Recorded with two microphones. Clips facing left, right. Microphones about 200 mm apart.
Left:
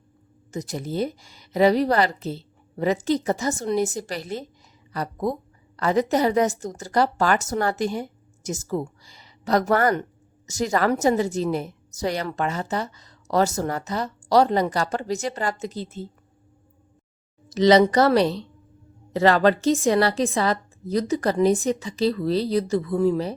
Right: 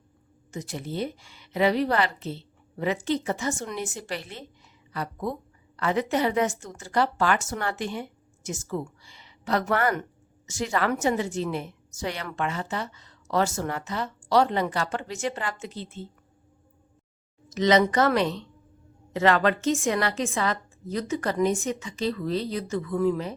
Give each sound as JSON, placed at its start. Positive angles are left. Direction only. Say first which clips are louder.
{"t": 0.5, "sound": "a woman's voice", "louder": "left 5 dB", "side_deg": 40}
{"t": 17.5, "sound": "a woman's voice", "louder": "left 5 dB", "side_deg": 35}